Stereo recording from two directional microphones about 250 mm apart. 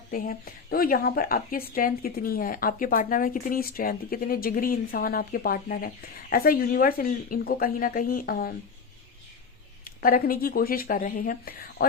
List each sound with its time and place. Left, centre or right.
0.1 s speech: left
10.0 s speech: left